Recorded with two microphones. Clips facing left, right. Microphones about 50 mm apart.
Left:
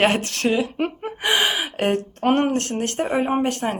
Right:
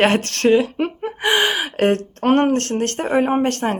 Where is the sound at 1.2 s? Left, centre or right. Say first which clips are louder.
Right 3 dB; right.